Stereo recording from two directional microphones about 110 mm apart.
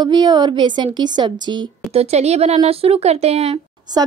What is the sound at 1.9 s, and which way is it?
Speech, 80° right.